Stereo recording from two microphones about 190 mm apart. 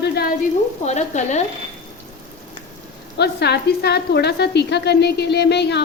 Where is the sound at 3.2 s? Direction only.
60° left (ahead or behind).